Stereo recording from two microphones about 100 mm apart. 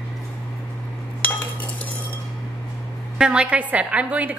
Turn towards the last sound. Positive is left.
turn(degrees=-15)  # may be behind; listen again after turning